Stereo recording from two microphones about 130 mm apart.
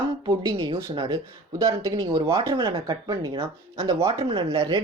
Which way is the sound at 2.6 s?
30° right (ahead or behind).